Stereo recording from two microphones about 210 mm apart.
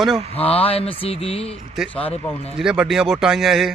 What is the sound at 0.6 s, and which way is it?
Speech, 25° left (ahead or behind).